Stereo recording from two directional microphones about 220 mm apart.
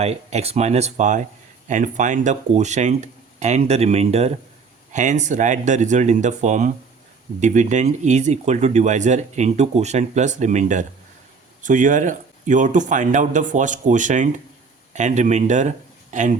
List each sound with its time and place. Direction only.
0.0 s speech: 30° right (ahead or behind)